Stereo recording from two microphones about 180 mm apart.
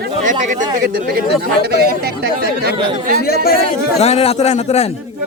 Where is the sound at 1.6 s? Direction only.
60° right (ahead or behind).